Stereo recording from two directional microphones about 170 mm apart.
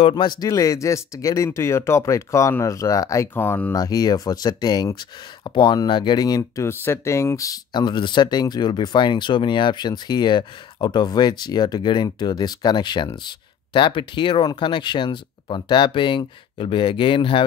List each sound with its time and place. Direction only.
0.0 s speech: 25° left (ahead or behind)